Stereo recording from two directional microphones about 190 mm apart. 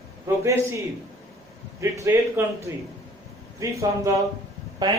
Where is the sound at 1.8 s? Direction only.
15° right (ahead or behind).